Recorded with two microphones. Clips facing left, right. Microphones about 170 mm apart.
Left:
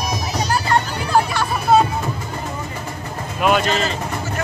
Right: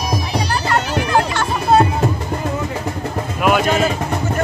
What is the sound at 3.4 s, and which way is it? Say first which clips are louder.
Vehicle: right 1 dB; 5° right (ahead or behind).